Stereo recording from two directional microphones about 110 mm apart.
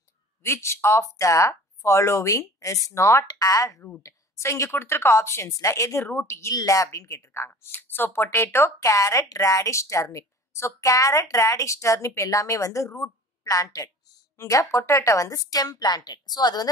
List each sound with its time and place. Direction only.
0.4 s a woman's voice: 25° left (ahead or behind)